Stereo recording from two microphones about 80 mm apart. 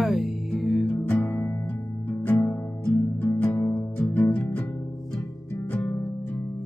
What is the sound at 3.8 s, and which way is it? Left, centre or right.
Music, left.